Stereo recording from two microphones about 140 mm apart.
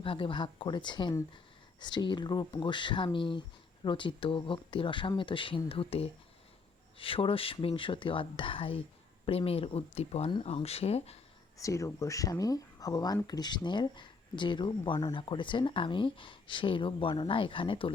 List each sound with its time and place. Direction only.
0.0 s speech: 40° left (ahead or behind)
11.5 s speech: 20° left (ahead or behind); by 17.9 s 40° left (ahead or behind)